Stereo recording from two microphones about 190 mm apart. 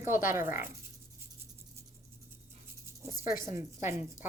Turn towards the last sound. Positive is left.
turn(degrees=-15)  # may be behind; listen again after turning